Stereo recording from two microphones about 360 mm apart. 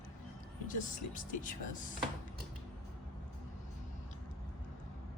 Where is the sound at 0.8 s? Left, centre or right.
Left.